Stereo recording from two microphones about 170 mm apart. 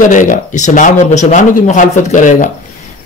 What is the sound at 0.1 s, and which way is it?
Speech, 50° left (ahead or behind).